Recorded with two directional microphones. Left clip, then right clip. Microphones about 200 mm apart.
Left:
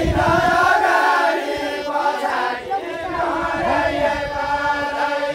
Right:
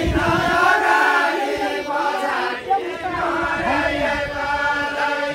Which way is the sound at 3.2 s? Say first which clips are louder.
Left 1 dB; 50° left (ahead or behind).